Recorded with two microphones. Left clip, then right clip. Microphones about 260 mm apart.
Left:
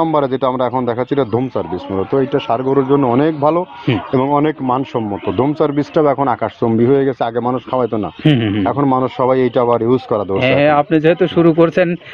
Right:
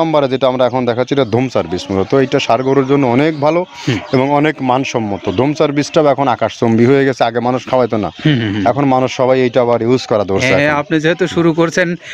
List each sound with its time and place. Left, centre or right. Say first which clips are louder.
0.0 s speech: right 2 dB; right
10.4 s speech: left 1 dB; right